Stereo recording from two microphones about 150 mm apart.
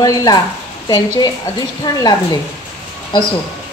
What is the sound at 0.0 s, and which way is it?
Speech, 25° left (ahead or behind).